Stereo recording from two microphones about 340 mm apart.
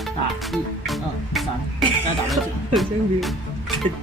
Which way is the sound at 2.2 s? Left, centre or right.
Centre.